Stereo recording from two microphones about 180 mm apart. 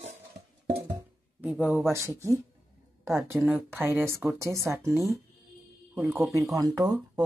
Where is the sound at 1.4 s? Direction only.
5° right (ahead or behind).